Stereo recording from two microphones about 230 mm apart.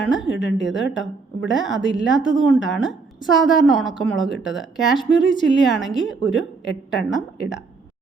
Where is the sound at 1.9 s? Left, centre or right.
Centre.